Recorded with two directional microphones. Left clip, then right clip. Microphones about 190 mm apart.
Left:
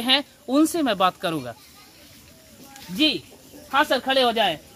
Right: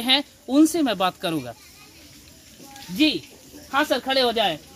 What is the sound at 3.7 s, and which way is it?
Speech, 20° right (ahead or behind).